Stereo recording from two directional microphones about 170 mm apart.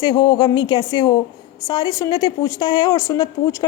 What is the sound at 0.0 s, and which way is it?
A woman's voice, 25° left (ahead or behind).